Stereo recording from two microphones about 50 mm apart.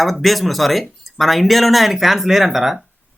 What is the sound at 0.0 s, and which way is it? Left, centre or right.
Speech, centre.